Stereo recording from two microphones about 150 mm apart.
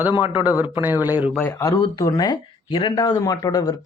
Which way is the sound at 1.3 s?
15° left (ahead or behind).